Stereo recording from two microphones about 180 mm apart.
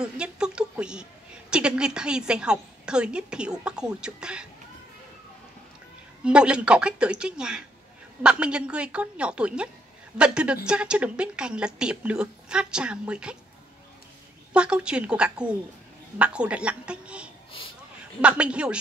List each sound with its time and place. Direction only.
0.0 s a woman's voice: 5° right (ahead or behind)
6.2 s a woman's voice: 5° right (ahead or behind)
14.5 s a woman's voice: 5° right (ahead or behind)